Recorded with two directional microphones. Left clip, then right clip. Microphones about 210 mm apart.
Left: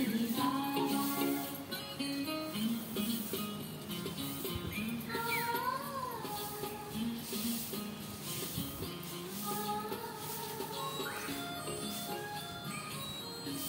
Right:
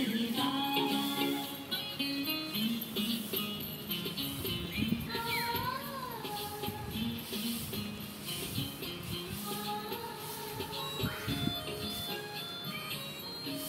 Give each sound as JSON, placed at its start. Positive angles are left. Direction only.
{"t": 0.0, "sound": "music", "side_deg": -5}